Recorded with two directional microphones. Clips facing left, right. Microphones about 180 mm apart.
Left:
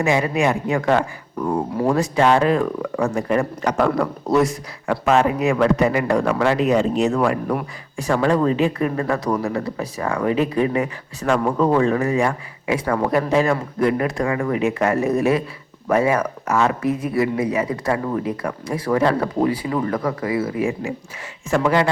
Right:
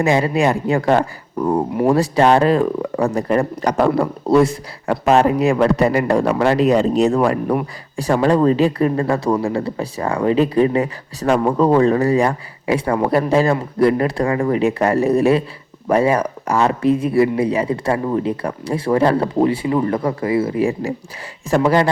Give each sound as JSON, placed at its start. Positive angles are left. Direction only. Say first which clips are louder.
{"t": 0.0, "sound": "speech", "louder": "right 3 dB", "side_deg": -35}